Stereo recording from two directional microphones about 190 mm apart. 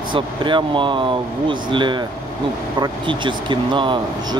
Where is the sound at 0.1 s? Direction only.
25° right (ahead or behind).